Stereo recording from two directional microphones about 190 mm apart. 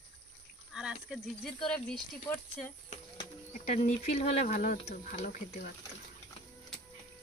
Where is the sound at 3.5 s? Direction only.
40° left (ahead or behind).